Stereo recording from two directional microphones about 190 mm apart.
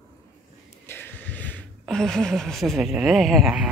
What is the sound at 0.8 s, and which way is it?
Speech, 10° left (ahead or behind).